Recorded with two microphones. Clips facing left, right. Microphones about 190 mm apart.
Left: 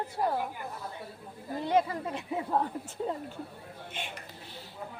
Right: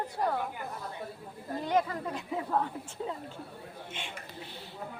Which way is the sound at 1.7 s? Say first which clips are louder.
Left 2 dB; 25° left (ahead or behind).